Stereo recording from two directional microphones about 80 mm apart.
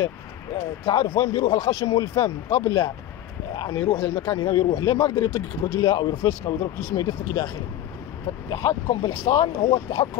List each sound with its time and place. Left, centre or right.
0.8 s speech: left
1.4 s speech: left
4.0 s speech: left
9.2 s speech: left